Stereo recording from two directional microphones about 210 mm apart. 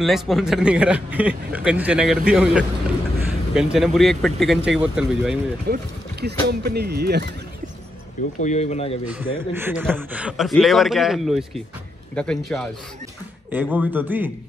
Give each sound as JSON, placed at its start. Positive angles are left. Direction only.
{"t": 0.0, "sound": "a man's voice", "side_deg": 0}
{"t": 5.7, "sound": "speech", "side_deg": -50}
{"t": 8.4, "sound": "speech", "side_deg": 35}
{"t": 9.0, "sound": "a man's voice", "side_deg": -10}
{"t": 13.5, "sound": "a man's voice", "side_deg": -10}